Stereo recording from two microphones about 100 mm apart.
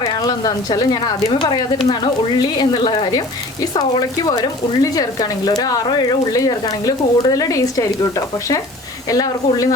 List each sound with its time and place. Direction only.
0.0 s speech: 40° left (ahead or behind)